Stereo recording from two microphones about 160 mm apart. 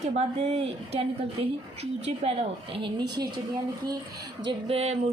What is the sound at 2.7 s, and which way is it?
Speech, 30° right (ahead or behind).